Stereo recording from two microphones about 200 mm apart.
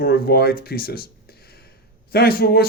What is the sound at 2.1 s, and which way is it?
Speech, 50° left (ahead or behind).